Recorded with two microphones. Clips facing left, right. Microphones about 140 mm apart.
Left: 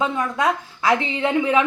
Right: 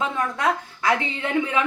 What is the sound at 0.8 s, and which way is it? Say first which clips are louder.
Speech: left 4 dB; 20° left (ahead or behind).